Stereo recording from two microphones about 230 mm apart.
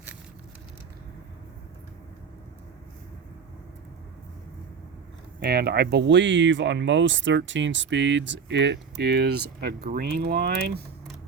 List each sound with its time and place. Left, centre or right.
5.4 s speech: right